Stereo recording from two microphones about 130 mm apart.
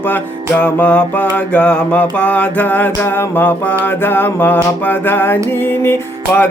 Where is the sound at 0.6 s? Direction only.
10° left (ahead or behind).